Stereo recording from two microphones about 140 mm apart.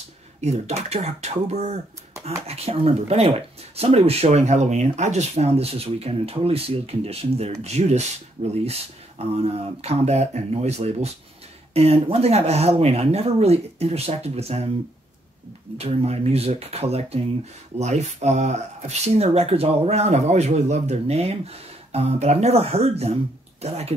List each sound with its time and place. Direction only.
0.4 s speech: 50° right (ahead or behind)
15.8 s speech: 45° right (ahead or behind)